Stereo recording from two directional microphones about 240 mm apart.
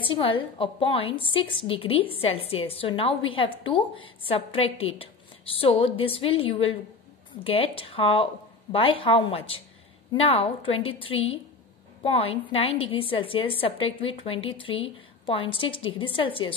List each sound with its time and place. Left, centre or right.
0.0 s a woman's voice: left